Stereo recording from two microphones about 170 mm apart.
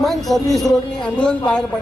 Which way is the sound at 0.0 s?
Centre (ahead or behind).